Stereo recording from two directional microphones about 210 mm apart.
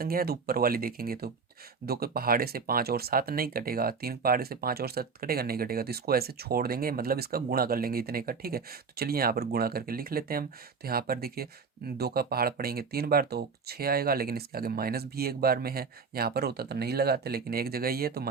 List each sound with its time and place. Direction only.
0.0 s speech: 45° right (ahead or behind)